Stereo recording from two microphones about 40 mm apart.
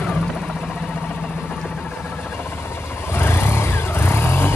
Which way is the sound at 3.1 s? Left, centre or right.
Left.